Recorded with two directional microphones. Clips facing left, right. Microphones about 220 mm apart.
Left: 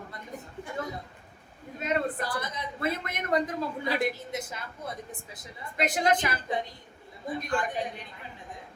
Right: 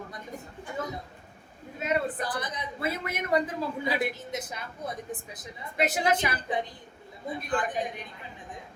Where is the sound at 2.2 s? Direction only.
20° right (ahead or behind).